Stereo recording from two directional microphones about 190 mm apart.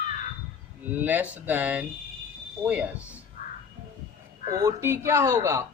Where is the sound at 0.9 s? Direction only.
10° right (ahead or behind).